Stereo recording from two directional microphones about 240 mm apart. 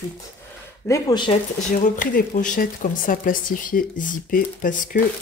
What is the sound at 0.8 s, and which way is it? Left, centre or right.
Speech, centre.